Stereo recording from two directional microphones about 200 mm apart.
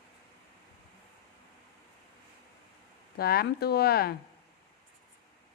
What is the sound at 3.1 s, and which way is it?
Speech, 50° left (ahead or behind).